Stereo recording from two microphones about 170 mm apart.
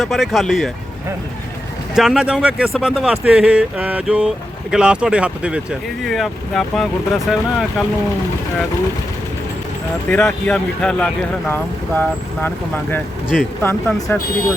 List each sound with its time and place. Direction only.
0.0 s speech: centre (ahead or behind)
2.0 s speech: 5° right (ahead or behind)
10.1 s speech: 5° left (ahead or behind)
13.6 s speech: 15° left (ahead or behind)